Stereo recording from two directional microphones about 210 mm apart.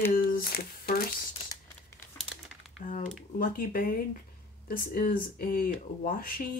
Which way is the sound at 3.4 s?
40° left (ahead or behind).